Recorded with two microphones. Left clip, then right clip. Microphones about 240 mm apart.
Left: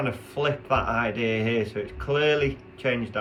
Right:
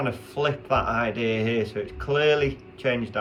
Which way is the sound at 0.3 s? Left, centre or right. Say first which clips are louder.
Right 1 dB; centre.